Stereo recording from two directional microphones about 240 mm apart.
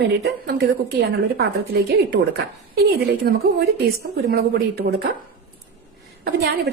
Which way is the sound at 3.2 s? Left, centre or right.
Right.